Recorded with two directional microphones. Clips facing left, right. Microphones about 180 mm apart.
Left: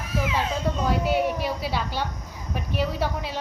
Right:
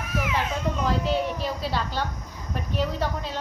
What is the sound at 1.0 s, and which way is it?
A woman's voice, 10° left (ahead or behind).